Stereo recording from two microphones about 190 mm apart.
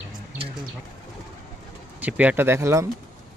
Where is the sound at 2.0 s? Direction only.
5° right (ahead or behind).